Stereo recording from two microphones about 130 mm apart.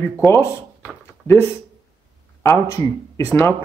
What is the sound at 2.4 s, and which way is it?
Speech, 25° left (ahead or behind).